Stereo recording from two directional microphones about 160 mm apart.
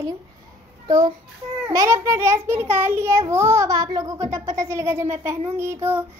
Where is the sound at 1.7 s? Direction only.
20° right (ahead or behind).